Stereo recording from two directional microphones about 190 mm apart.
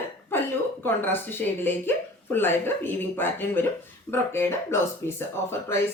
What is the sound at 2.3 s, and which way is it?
Speech, 10° left (ahead or behind).